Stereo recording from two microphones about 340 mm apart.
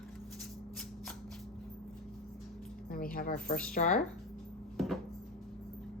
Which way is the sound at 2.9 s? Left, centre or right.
Left.